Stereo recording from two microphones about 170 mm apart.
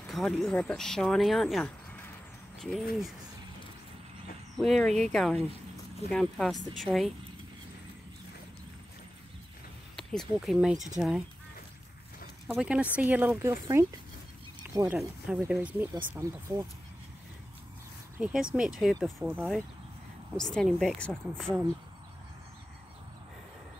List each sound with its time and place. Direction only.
0.0 s speech: centre (ahead or behind)
4.6 s speech: centre (ahead or behind)
9.9 s speech: centre (ahead or behind)
12.5 s speech: 5° right (ahead or behind)
15.0 s speech: 5° right (ahead or behind)
18.1 s speech: 5° right (ahead or behind)
19.2 s speech: 10° right (ahead or behind)
20.3 s speech: 5° left (ahead or behind)